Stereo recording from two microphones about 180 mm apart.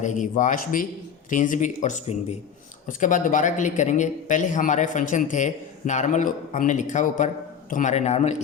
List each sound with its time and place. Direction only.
0.0 s speech: 45° left (ahead or behind)